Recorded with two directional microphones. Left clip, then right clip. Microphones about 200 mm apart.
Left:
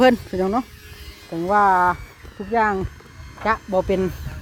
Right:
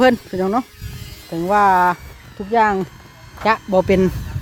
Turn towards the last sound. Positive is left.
turn(degrees=-25)  # may be behind; listen again after turning